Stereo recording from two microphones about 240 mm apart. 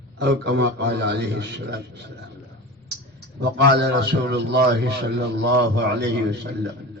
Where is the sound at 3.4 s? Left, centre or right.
Right.